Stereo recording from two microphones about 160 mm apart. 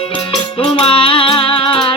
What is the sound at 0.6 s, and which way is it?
Music, 35° left (ahead or behind).